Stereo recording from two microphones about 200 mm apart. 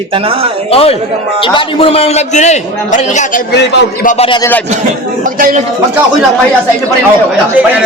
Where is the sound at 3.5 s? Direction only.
60° left (ahead or behind).